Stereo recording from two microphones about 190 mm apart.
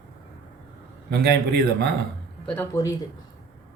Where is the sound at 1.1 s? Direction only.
60° right (ahead or behind).